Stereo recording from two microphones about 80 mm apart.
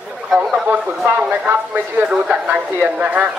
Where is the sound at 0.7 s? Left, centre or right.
Centre.